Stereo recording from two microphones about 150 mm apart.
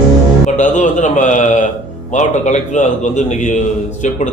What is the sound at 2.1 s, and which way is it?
A man's voice, 50° left (ahead or behind).